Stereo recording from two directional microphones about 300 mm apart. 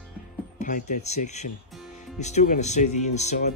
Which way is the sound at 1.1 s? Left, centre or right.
Left.